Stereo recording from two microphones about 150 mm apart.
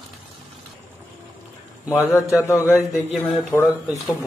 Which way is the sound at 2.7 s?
Centre (ahead or behind).